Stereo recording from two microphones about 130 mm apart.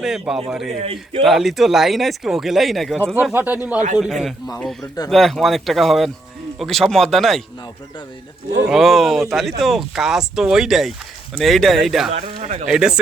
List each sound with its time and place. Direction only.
0.0 s speech: 5° right (ahead or behind)
0.8 s a man's voice: 50° right (ahead or behind)
1.2 s speech: centre (ahead or behind)
3.3 s speech: 15° right (ahead or behind)
3.9 s speech: centre (ahead or behind)
8.7 s speech: centre (ahead or behind)
12.1 s speech: 60° right (ahead or behind)
12.6 s speech: 5° right (ahead or behind)